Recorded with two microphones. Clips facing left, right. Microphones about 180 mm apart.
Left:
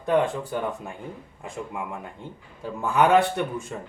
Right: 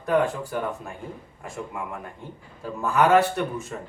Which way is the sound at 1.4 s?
15° left (ahead or behind).